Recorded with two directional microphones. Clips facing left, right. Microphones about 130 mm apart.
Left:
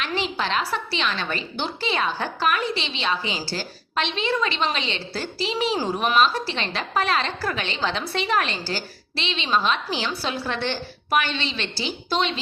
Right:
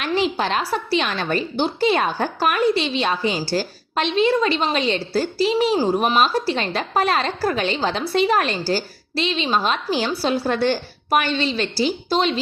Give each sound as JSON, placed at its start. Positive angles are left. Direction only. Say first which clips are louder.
{"t": 0.0, "sound": "a woman's voice", "louder": "right 5 dB", "side_deg": -45}